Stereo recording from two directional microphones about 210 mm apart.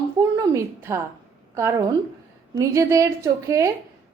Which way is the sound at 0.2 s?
15° right (ahead or behind).